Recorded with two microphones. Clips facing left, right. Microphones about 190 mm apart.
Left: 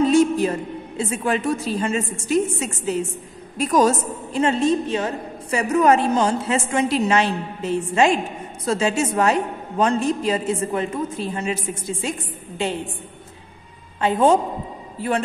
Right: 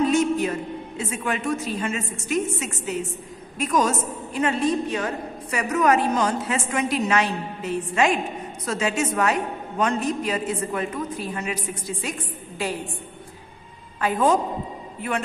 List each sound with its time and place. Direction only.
0.1 s a woman's voice: 30° left (ahead or behind)
14.0 s a woman's voice: 25° left (ahead or behind)